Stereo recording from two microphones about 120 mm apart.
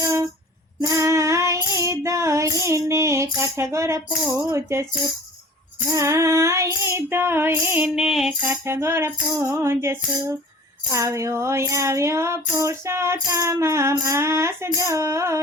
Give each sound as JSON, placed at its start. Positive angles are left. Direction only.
{"t": 0.8, "sound": "child singing", "side_deg": -25}
{"t": 4.4, "sound": "music", "side_deg": -25}
{"t": 5.9, "sound": "music", "side_deg": -25}
{"t": 7.9, "sound": "a sound", "side_deg": -5}
{"t": 8.3, "sound": "music", "side_deg": -15}